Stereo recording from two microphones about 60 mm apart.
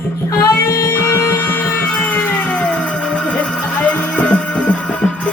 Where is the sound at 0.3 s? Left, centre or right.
Left.